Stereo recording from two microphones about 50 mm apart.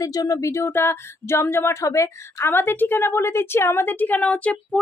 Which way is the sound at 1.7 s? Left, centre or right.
Left.